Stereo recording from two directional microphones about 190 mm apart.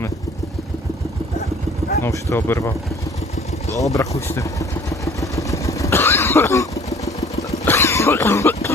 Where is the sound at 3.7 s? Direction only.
15° left (ahead or behind).